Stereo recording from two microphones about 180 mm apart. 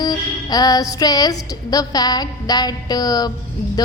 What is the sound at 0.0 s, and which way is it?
A woman's voice, 20° left (ahead or behind).